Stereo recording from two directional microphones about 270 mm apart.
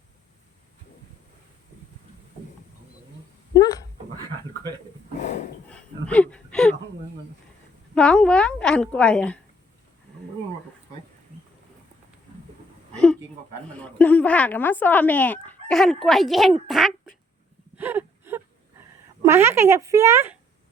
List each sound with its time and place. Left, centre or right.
3.5 s dog: centre
5.7 s a sound: centre
7.9 s chicken: centre
12.9 s a sound: centre
13.8 s chicken: centre
17.7 s wail: centre
19.2 s speech: centre